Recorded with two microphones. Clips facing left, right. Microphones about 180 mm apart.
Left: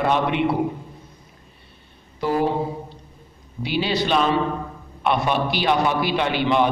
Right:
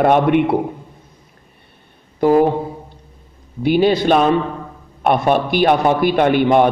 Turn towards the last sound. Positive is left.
turn(degrees=-50)  # may be behind; listen again after turning